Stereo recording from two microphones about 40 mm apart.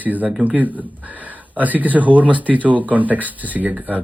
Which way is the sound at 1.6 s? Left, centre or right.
Right.